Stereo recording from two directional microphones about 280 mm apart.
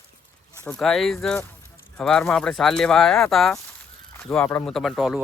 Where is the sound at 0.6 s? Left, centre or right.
Centre.